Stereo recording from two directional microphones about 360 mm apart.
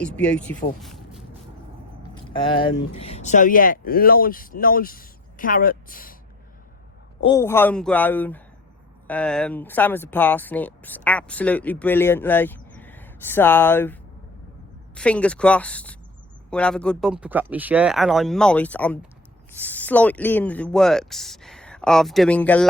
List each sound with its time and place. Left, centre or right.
0.0 s speech: centre
0.8 s a sound: centre
2.1 s speech: centre
7.2 s speech: centre